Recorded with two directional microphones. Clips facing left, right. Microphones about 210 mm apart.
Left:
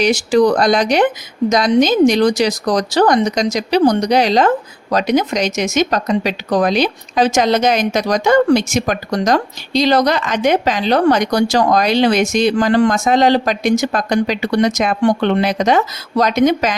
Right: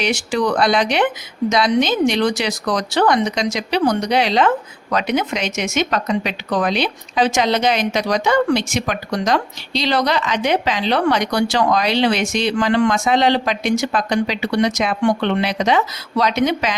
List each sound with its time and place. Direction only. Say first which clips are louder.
0.0 s speech: left 7 dB; 40° left (ahead or behind)